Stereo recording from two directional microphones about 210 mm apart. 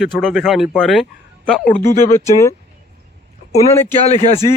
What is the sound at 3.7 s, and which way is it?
Speech, 10° left (ahead or behind).